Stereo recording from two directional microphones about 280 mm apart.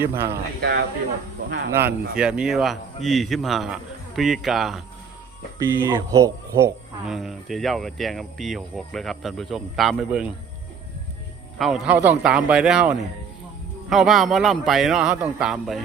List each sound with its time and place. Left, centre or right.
0.0 s speech: centre
0.3 s speech: right
1.7 s speech: centre
7.1 s speech: centre
11.5 s speech: centre